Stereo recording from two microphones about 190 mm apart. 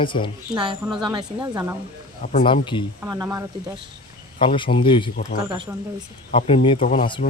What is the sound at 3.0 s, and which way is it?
Speech, 20° right (ahead or behind).